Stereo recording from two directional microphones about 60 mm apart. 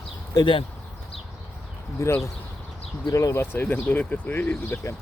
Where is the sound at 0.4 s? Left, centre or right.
Left.